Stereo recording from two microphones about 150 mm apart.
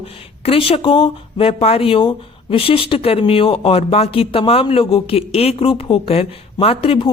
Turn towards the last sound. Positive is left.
turn(degrees=40)  # may be behind; listen again after turning